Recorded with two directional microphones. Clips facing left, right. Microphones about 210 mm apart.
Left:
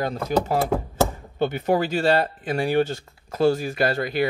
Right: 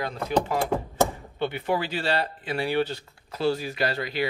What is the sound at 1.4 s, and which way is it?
Speech, 45° left (ahead or behind).